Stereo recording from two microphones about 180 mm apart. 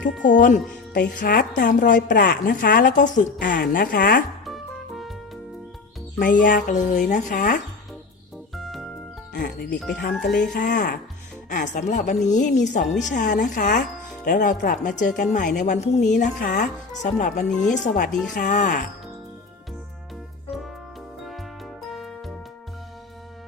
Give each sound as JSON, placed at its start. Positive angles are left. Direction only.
{"t": 0.2, "sound": "speech", "side_deg": 45}
{"t": 4.4, "sound": "music", "side_deg": 0}
{"t": 6.1, "sound": "speech", "side_deg": 50}
{"t": 8.5, "sound": "music", "side_deg": 0}
{"t": 9.3, "sound": "speech", "side_deg": 55}
{"t": 10.2, "sound": "speech", "side_deg": 65}
{"t": 10.5, "sound": "speech", "side_deg": 45}
{"t": 21.8, "sound": "music", "side_deg": 0}